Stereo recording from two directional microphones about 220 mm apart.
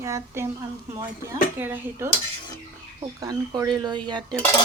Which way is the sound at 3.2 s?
15° right (ahead or behind).